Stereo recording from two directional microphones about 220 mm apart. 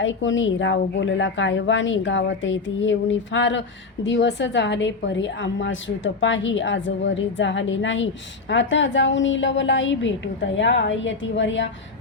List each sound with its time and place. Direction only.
0.0 s a woman's voice: 60° left (ahead or behind)